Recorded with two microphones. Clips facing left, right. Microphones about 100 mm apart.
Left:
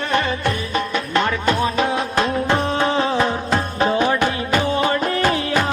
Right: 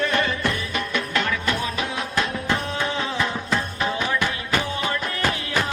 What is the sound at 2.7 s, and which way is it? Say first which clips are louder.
Music: left 7 dB; 40° left (ahead or behind).